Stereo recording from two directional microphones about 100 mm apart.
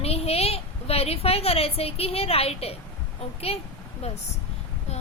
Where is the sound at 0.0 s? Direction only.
85° left.